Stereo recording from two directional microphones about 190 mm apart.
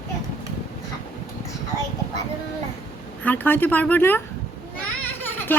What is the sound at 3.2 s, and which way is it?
Speech, 10° left (ahead or behind).